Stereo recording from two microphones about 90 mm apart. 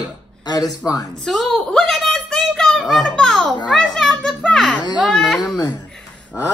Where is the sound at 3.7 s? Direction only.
5° left (ahead or behind).